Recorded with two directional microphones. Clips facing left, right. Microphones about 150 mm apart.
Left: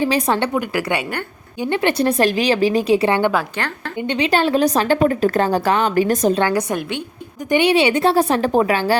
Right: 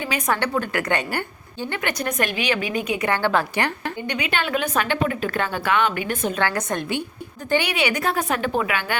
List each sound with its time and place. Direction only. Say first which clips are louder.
0.0 s a woman's voice: left 6 dB; 35° left (ahead or behind)
0.6 s a woman's voice: left 2 dB; 10° left (ahead or behind)
1.6 s speech: left 9 dB; 25° left (ahead or behind)
3.6 s a woman's voice: right 2 dB; 10° right (ahead or behind)
4.0 s speech: left 9 dB; 30° left (ahead or behind)
6.4 s a woman's voice: left 5 dB; 10° left (ahead or behind)
7.5 s speech: left 7 dB; 25° left (ahead or behind)